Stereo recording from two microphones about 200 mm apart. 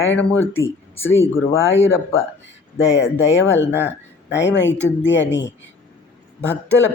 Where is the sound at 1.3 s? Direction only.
70° left (ahead or behind).